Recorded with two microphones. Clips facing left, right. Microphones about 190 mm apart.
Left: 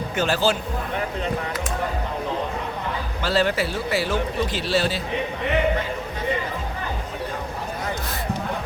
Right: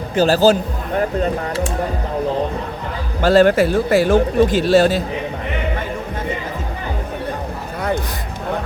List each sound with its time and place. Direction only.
0.2 s speech: 40° right (ahead or behind)
3.2 s speech: 50° right (ahead or behind)